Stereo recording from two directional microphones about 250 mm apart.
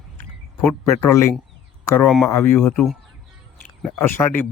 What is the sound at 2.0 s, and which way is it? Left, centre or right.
Speech, centre.